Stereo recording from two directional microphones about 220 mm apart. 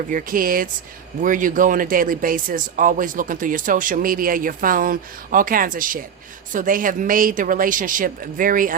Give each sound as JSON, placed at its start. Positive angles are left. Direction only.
{"t": 0.1, "sound": "speech", "side_deg": -40}